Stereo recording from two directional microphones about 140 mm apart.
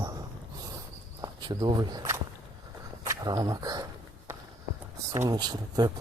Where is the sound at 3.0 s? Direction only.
25° right (ahead or behind).